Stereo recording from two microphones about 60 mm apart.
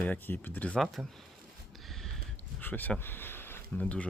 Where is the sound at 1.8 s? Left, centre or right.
Centre.